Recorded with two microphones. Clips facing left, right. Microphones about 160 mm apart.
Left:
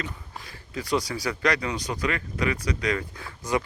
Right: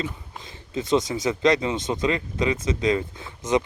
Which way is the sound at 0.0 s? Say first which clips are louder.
Right 4 dB; 20° right (ahead or behind).